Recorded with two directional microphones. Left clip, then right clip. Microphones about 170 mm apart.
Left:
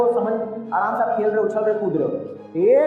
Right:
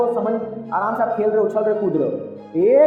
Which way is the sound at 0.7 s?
55° right (ahead or behind).